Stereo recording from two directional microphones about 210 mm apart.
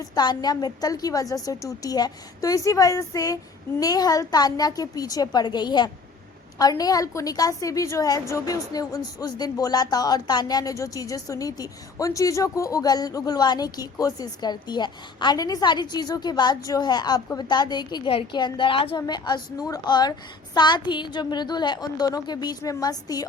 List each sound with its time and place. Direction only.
0.0 s a woman's voice: 20° left (ahead or behind)